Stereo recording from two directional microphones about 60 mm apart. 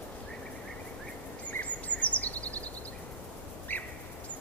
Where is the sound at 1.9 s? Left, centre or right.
Left.